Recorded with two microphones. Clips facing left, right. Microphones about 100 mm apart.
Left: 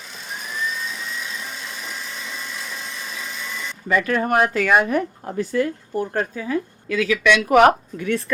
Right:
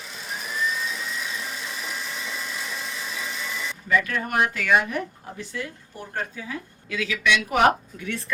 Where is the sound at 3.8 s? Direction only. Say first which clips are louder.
Left 5 dB; 45° left (ahead or behind).